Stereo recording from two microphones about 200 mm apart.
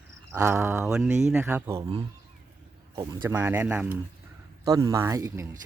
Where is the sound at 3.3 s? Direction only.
10° right (ahead or behind).